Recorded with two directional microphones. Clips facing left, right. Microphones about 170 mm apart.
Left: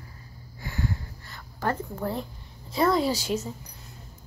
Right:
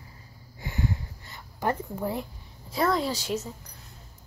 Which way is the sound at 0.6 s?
20° right (ahead or behind).